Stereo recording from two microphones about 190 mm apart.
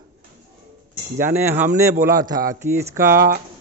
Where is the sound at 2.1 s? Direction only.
50° right (ahead or behind).